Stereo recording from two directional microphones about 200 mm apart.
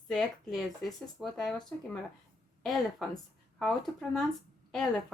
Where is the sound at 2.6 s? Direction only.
Centre (ahead or behind).